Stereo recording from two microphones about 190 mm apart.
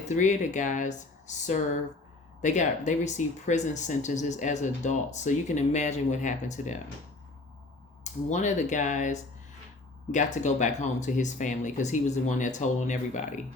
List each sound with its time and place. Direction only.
0.1 s speech: 40° left (ahead or behind)
8.0 s speech: 40° left (ahead or behind)